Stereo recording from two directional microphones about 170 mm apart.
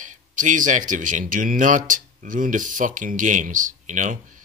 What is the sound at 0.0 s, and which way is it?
Speech, 50° right (ahead or behind).